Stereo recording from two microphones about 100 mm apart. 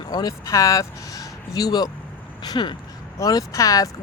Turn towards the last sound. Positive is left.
turn(degrees=35)  # may be behind; listen again after turning